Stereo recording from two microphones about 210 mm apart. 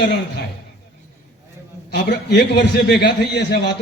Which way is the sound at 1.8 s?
50° left (ahead or behind).